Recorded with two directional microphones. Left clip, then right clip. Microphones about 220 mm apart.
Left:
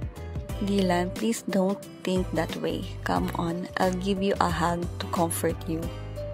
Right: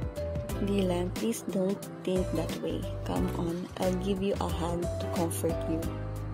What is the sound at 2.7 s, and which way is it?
Speech, 30° left (ahead or behind).